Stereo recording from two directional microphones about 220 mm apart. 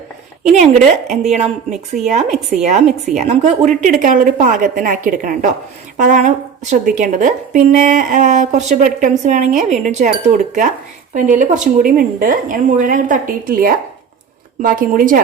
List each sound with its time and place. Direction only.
0.4 s a woman's voice: 30° right (ahead or behind)